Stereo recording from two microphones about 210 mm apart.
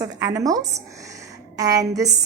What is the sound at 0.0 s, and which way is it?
A woman's voice, 15° right (ahead or behind).